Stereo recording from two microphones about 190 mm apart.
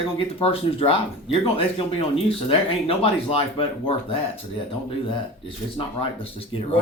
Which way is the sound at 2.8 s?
30° left (ahead or behind).